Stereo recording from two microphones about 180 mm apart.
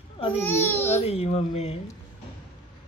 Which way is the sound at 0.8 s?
35° left (ahead or behind).